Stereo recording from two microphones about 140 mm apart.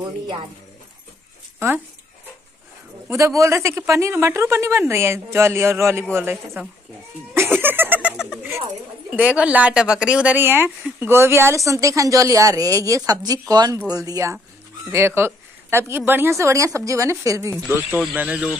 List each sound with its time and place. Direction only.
0.0 s speech: 35° right (ahead or behind)
3.1 s speech: 20° right (ahead or behind)
7.3 s giggle: 15° right (ahead or behind)
9.1 s speech: 10° right (ahead or behind)